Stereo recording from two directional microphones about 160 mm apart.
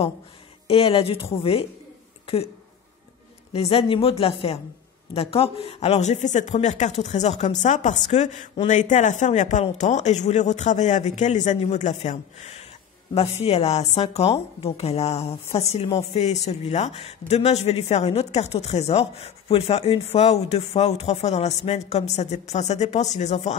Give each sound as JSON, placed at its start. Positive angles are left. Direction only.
{"t": 0.7, "sound": "speech", "side_deg": 35}
{"t": 3.5, "sound": "speech", "side_deg": 35}